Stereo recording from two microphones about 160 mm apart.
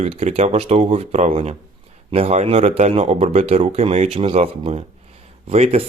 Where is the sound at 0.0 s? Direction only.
40° right (ahead or behind).